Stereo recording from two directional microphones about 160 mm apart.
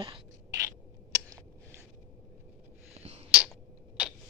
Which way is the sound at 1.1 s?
20° right (ahead or behind).